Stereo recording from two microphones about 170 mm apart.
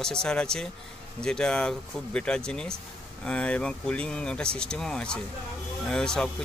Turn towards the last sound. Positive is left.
turn(degrees=5)  # may be behind; listen again after turning